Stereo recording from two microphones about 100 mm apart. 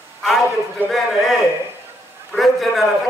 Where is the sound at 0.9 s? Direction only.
Centre (ahead or behind).